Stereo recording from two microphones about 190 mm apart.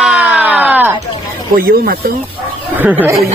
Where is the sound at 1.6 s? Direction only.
55° right (ahead or behind).